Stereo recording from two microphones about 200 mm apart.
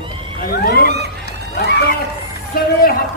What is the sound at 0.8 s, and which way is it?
Speech, 55° right (ahead or behind).